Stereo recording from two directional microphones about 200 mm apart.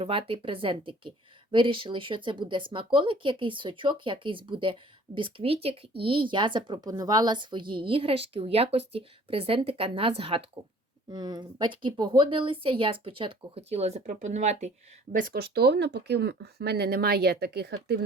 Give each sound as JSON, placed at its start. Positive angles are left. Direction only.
{"t": 0.0, "sound": "a woman's voice", "side_deg": -25}
{"t": 15.1, "sound": "speech", "side_deg": -50}